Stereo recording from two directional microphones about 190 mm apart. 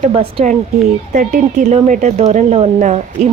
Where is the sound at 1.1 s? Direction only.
45° right (ahead or behind).